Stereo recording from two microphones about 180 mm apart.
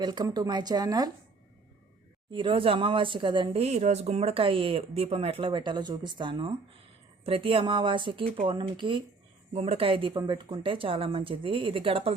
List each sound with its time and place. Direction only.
0.0 s speech: 25° right (ahead or behind)
2.3 s speech: 30° right (ahead or behind)